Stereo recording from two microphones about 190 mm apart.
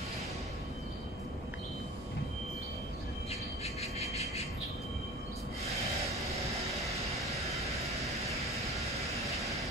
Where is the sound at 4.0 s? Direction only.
35° left (ahead or behind).